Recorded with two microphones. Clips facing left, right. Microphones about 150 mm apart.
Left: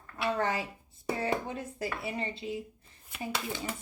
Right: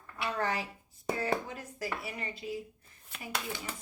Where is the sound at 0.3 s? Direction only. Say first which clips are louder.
Left 3 dB; 20° left (ahead or behind).